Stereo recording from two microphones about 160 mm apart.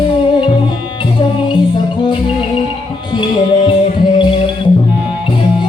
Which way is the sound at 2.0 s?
30° left (ahead or behind).